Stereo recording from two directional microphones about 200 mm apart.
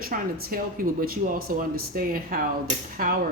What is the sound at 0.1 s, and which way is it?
Speech, 45° right (ahead or behind).